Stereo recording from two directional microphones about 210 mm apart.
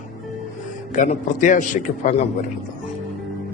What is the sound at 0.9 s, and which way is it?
Speech, 35° left (ahead or behind).